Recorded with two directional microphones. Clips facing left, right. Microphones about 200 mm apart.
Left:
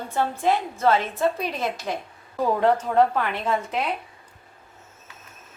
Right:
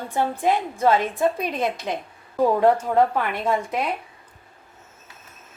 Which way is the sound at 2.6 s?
10° right (ahead or behind).